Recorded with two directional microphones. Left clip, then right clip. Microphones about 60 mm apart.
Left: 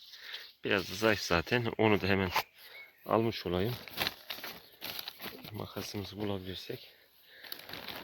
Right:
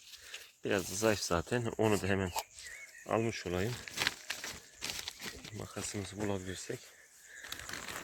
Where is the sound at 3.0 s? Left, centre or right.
Left.